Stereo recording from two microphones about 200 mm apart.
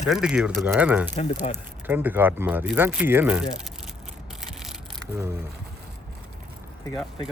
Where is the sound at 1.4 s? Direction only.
35° left (ahead or behind).